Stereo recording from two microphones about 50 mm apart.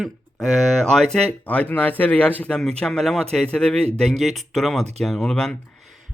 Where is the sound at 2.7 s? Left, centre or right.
Centre.